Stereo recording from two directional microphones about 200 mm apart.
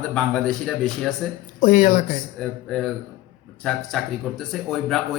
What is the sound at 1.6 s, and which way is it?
Speech, 40° left (ahead or behind).